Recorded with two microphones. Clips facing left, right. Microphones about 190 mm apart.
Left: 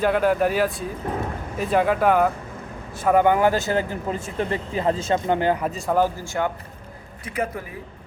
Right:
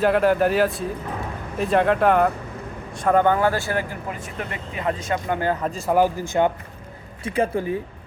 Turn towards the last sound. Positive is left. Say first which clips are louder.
# right 6 dB
turn(degrees=-30)  # may be behind; listen again after turning